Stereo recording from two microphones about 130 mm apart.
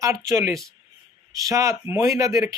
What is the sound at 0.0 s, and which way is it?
Speech, 25° right (ahead or behind).